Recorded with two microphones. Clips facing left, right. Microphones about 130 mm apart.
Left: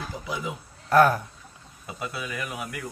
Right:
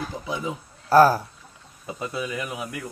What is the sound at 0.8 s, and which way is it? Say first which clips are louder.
Speech: right 3 dB; 30° right (ahead or behind).